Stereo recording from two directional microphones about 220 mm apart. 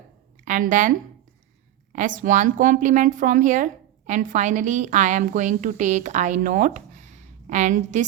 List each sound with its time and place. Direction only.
0.4 s a woman's voice: 35° right (ahead or behind)